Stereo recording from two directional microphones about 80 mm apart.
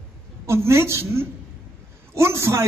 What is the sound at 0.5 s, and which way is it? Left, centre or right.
A man's voice, right.